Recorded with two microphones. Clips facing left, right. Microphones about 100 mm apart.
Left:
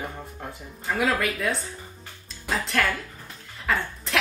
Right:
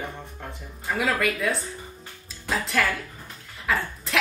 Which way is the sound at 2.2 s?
Centre (ahead or behind).